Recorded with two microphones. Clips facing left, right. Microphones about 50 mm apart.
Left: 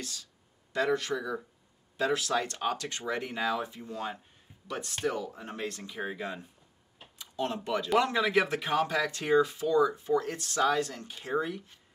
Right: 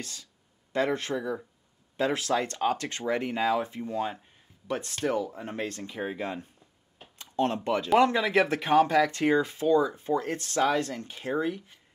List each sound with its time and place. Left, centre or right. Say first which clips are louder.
0.0 s speech: right 1 dB; right